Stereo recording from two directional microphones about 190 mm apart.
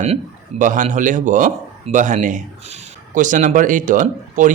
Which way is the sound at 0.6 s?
40° right (ahead or behind).